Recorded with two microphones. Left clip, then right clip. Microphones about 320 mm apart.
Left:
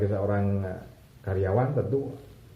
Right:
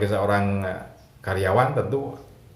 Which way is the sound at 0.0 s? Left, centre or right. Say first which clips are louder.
Right 6 dB; right.